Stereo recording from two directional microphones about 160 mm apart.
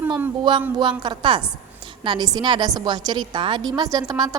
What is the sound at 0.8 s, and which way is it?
A woman's voice, 30° right (ahead or behind).